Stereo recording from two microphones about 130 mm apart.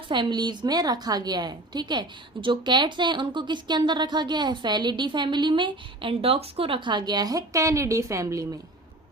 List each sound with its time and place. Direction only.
0.1 s a woman's voice: 35° right (ahead or behind)